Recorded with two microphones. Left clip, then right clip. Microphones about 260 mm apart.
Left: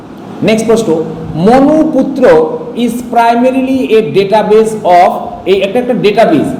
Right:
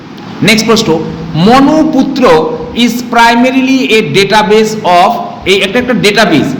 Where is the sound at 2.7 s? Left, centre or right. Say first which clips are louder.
Right 3 dB; right.